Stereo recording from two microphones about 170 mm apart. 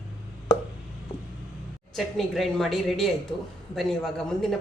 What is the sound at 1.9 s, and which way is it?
A woman's voice, centre (ahead or behind).